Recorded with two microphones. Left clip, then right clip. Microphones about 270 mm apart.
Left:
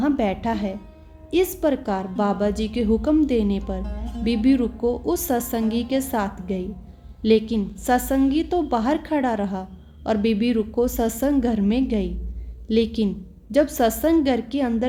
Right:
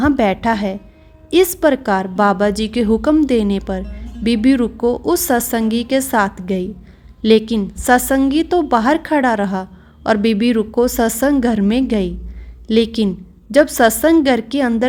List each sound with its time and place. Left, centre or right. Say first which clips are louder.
0.0 s a woman's voice: right 8 dB; right